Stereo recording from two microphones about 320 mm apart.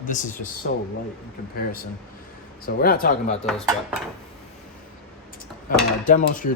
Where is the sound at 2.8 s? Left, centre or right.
Left.